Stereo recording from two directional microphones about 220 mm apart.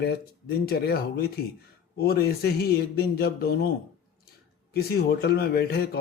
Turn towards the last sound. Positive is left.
turn(degrees=45)  # may be behind; listen again after turning